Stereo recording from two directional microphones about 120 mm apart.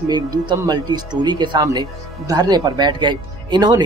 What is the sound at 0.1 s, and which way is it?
Speech, 35° right (ahead or behind).